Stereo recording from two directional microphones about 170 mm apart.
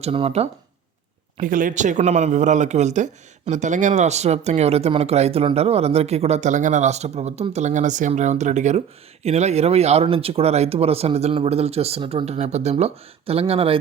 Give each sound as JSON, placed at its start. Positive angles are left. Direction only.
{"t": 0.0, "sound": "speech", "side_deg": -35}
{"t": 1.4, "sound": "speech", "side_deg": -50}